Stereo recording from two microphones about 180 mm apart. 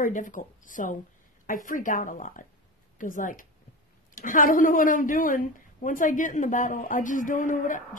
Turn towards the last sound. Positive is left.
turn(degrees=45)  # may be behind; listen again after turning